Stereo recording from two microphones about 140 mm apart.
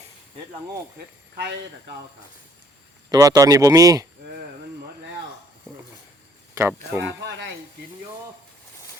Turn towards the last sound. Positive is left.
turn(degrees=-15)  # may be behind; listen again after turning